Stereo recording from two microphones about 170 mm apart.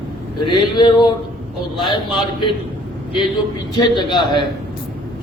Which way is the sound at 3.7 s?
25° left (ahead or behind).